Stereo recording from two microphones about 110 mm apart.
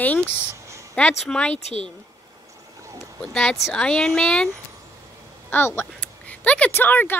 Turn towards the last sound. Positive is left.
turn(degrees=15)  # may be behind; listen again after turning